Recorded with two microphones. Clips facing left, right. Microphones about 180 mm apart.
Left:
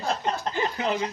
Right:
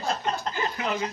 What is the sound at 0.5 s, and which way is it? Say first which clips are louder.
Speech: left 3 dB; 30° left (ahead or behind).